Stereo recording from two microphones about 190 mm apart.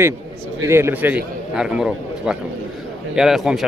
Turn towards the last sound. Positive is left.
turn(degrees=0)  # may be behind; listen again after turning